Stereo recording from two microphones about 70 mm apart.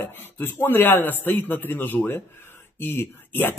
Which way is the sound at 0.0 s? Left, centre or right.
Left.